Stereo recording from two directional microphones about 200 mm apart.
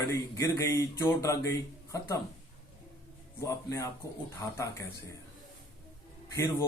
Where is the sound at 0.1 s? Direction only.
15° left (ahead or behind).